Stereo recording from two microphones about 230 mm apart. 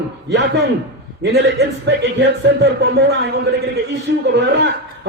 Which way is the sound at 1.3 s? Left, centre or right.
Right.